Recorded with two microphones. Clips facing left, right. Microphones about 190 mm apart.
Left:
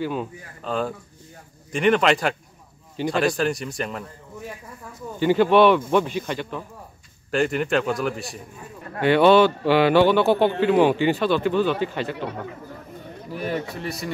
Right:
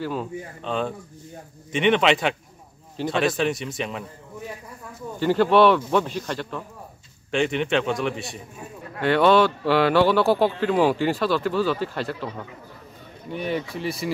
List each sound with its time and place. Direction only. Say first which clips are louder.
0.0 s a man's voice: left 1 dB; centre (ahead or behind)
5.2 s a man's voice: left 1 dB; 5° left (ahead or behind)
13.3 s a man's voice: right 1 dB; centre (ahead or behind)